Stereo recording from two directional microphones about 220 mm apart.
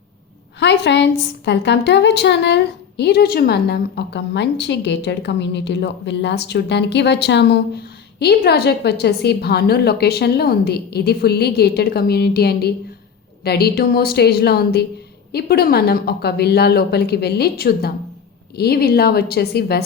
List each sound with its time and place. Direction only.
0.6 s a woman's voice: 55° left (ahead or behind)